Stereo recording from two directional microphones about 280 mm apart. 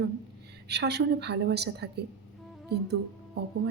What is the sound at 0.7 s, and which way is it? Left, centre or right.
A woman's voice, right.